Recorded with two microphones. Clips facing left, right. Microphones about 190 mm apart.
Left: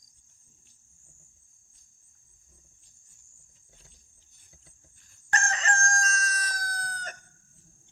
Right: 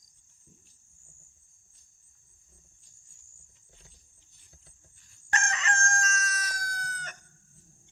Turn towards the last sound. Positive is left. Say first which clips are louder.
# left 2 dB
turn(degrees=40)  # may be behind; listen again after turning